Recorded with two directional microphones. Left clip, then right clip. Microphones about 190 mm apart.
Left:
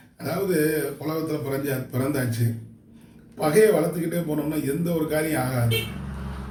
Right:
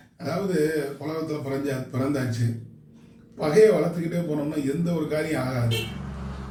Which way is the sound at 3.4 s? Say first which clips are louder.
Even; 15° left (ahead or behind).